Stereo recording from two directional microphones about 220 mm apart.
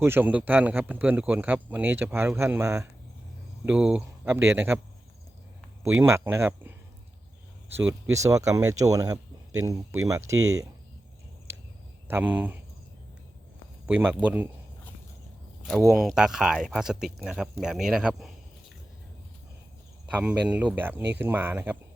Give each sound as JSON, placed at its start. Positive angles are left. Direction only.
{"t": 0.0, "sound": "speech", "side_deg": -10}
{"t": 6.0, "sound": "speech", "side_deg": -10}
{"t": 8.1, "sound": "speech", "side_deg": -15}
{"t": 12.0, "sound": "speech", "side_deg": -10}
{"t": 13.8, "sound": "speech", "side_deg": -5}
{"t": 15.6, "sound": "speech", "side_deg": 0}
{"t": 20.1, "sound": "speech", "side_deg": -5}